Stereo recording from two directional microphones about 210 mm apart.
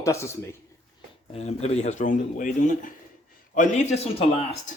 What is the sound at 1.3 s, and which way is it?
Speech, 30° left (ahead or behind).